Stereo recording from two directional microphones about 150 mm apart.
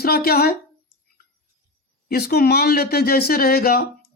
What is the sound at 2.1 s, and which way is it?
Speech, 90° left.